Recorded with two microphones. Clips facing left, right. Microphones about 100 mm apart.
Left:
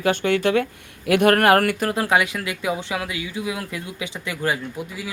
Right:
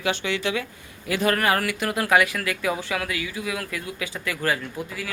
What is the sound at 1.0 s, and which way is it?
Speech, 65° left (ahead or behind).